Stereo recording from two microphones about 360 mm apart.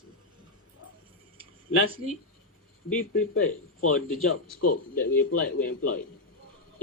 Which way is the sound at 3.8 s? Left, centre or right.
Left.